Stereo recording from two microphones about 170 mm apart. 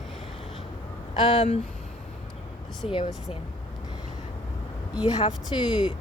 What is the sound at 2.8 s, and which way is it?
Speech, 35° left (ahead or behind).